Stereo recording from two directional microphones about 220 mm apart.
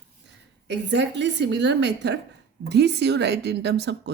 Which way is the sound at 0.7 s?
50° right (ahead or behind).